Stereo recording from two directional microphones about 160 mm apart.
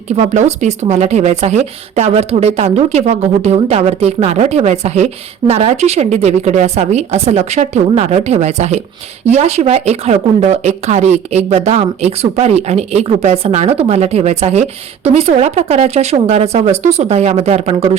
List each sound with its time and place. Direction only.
0.2 s speech: 45° right (ahead or behind)